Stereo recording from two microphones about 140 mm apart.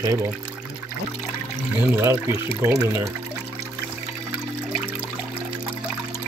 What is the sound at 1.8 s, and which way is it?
Speech, 20° right (ahead or behind).